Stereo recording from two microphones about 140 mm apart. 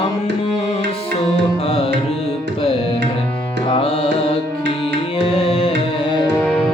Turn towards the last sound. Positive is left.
turn(degrees=40)  # may be behind; listen again after turning